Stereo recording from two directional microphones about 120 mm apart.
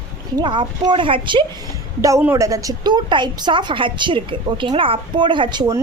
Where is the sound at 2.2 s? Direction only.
25° right (ahead or behind).